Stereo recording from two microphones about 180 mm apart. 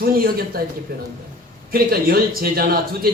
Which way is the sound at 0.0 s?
55° right (ahead or behind).